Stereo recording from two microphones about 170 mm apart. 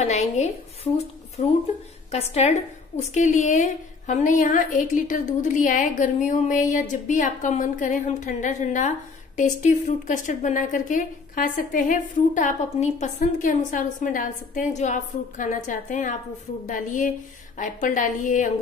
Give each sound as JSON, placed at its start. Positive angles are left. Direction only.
{"t": 0.0, "sound": "a woman's voice", "side_deg": 40}